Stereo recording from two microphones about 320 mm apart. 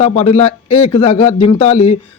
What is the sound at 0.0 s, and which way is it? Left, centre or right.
A man's voice, centre.